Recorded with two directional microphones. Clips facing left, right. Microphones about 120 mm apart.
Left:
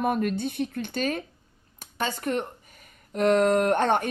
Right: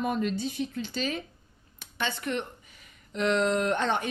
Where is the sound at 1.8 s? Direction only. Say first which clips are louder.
Left 3 dB; 40° left (ahead or behind).